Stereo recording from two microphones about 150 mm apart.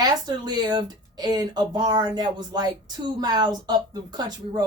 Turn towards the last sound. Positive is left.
turn(degrees=-25)  # may be behind; listen again after turning